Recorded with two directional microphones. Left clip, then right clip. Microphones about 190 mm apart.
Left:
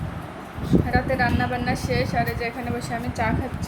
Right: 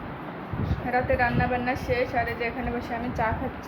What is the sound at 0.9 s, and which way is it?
Speech, 10° left (ahead or behind).